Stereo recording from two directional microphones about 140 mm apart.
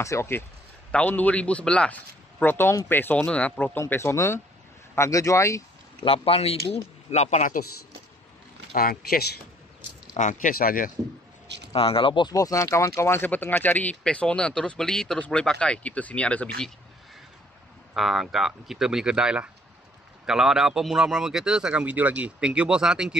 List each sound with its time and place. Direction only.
0.0 s speech: 20° left (ahead or behind)
6.0 s speech: 40° left (ahead or behind)
8.7 s speech: 90° left
10.1 s speech: 65° left (ahead or behind); by 10.9 s 90° left
11.7 s speech: 40° left (ahead or behind); by 16.4 s 10° left (ahead or behind)
17.9 s a man's voice: centre (ahead or behind)